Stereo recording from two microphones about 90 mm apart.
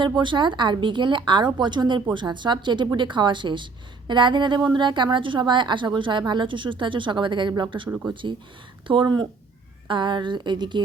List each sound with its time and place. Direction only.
0.2 s a woman's voice: 60° right (ahead or behind)